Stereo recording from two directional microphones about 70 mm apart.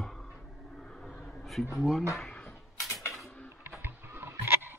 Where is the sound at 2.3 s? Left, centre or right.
Centre.